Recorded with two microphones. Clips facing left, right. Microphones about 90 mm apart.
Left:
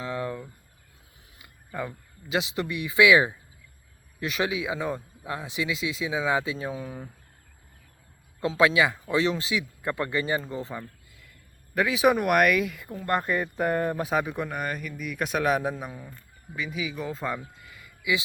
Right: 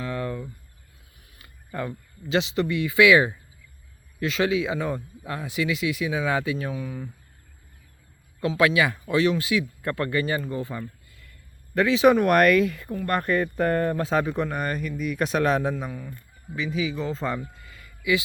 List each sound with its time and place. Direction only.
0.0 s a sound: 15° left (ahead or behind)
1.4 s a sound: 10° left (ahead or behind)
2.3 s speech: 15° left (ahead or behind); by 7.1 s 30° left (ahead or behind)
8.4 s speech: 25° left (ahead or behind)
11.7 s speech: 10° left (ahead or behind)
13.1 s speech: 20° left (ahead or behind)
15.9 s speech: 25° left (ahead or behind)
16.6 s speech: 5° left (ahead or behind)
17.5 s a sound: 15° left (ahead or behind)